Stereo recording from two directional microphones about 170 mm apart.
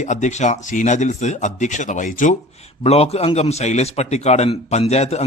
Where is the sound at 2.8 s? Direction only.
35° left (ahead or behind).